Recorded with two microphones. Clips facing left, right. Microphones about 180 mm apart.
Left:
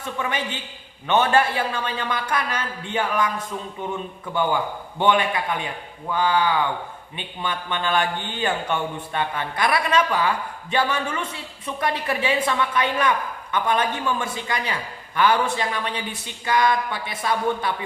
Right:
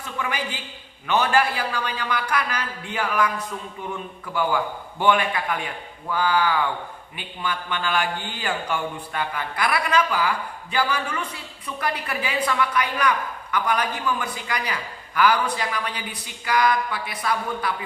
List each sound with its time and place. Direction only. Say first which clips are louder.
0.2 s a woman's voice: even; 25° left (ahead or behind)
4.4 s a woman's voice: left 1 dB; 25° left (ahead or behind)